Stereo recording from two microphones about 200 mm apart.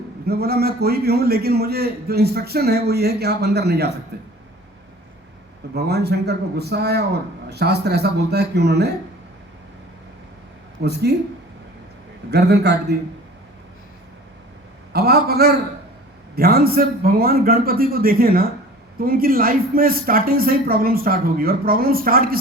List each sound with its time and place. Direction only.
0.3 s a man's voice: 50° right (ahead or behind)
5.7 s a man's voice: 55° right (ahead or behind)
10.8 s a man's voice: 55° right (ahead or behind)
12.3 s a man's voice: 55° right (ahead or behind)
14.9 s a man's voice: 50° right (ahead or behind)